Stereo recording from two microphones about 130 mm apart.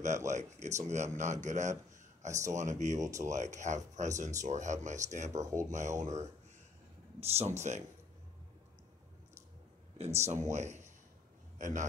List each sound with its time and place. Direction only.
0.3 s speech: 65° right (ahead or behind)
2.2 s speech: 25° right (ahead or behind)
2.5 s speech: 70° right (ahead or behind)
3.0 s speech: 25° right (ahead or behind)
3.3 s speech: 65° right (ahead or behind)
5.4 s speech: 25° right (ahead or behind)
5.7 s speech: 70° right (ahead or behind)
7.2 s speech: 50° right (ahead or behind)
9.9 s a man's voice: 60° right (ahead or behind)